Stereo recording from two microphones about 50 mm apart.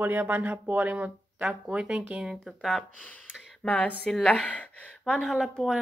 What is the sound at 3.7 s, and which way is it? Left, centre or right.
Speech, left.